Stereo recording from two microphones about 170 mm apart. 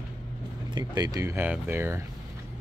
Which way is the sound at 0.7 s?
25° right (ahead or behind).